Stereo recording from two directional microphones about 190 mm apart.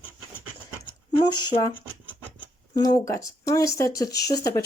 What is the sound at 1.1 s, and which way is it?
Speech, 25° left (ahead or behind).